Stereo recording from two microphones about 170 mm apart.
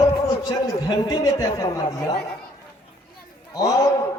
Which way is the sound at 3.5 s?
20° left (ahead or behind).